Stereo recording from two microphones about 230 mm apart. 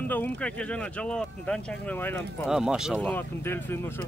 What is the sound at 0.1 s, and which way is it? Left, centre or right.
Speech, centre.